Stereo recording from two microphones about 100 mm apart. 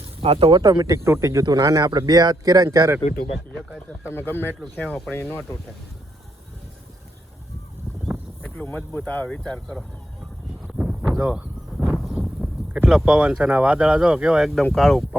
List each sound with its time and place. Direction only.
0.2 s speech: 70° right (ahead or behind)
0.6 s speech: 45° right (ahead or behind)
0.9 s speech: 25° right (ahead or behind)
4.1 s speech: 20° left (ahead or behind)
4.8 s speech: 5° left (ahead or behind)
8.6 s speech: 20° left (ahead or behind)
10.7 s a sound: 10° right (ahead or behind)
11.2 s speech: 20° right (ahead or behind)
11.8 s a sound: centre (ahead or behind)
12.7 s speech: 15° right (ahead or behind)